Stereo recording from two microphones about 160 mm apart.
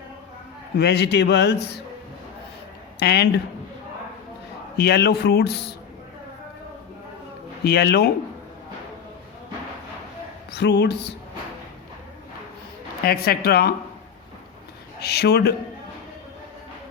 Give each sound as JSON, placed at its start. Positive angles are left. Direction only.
{"t": 0.8, "sound": "a man's voice", "side_deg": 90}
{"t": 3.0, "sound": "speech", "side_deg": 90}
{"t": 4.8, "sound": "a man's voice", "side_deg": 85}
{"t": 7.6, "sound": "a man's voice", "side_deg": 90}
{"t": 10.5, "sound": "a man's voice", "side_deg": 90}
{"t": 13.1, "sound": "speech", "side_deg": 70}
{"t": 15.0, "sound": "a man's voice", "side_deg": 90}